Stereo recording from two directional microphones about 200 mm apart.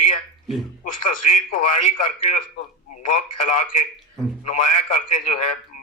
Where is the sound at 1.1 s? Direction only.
40° left (ahead or behind).